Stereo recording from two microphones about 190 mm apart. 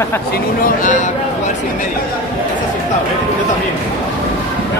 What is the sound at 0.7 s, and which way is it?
Speech, 40° left (ahead or behind).